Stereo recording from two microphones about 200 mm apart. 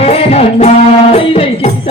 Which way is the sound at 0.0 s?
30° left (ahead or behind).